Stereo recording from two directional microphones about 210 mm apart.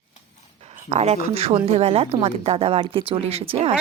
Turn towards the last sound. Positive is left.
turn(degrees=-25)  # may be behind; listen again after turning